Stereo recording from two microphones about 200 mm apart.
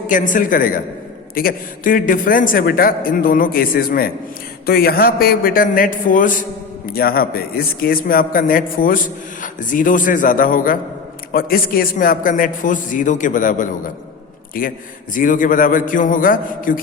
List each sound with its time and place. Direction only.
0.1 s a man's voice: 40° left (ahead or behind)